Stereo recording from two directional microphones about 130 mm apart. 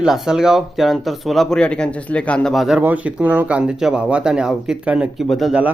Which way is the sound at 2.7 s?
10° right (ahead or behind).